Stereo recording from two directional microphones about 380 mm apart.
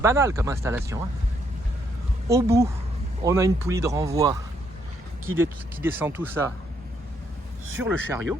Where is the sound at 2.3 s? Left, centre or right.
Centre.